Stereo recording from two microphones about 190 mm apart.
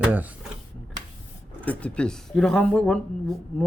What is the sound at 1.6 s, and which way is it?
Speech, 5° left (ahead or behind).